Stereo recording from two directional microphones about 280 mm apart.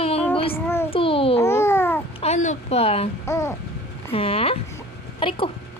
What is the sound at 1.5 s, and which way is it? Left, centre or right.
Babbling, centre.